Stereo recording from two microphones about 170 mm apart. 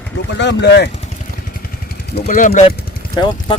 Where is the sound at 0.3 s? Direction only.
85° left.